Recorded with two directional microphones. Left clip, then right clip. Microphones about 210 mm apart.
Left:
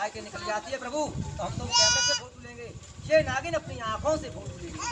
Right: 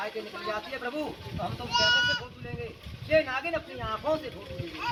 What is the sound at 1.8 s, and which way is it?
Speech, 20° left (ahead or behind).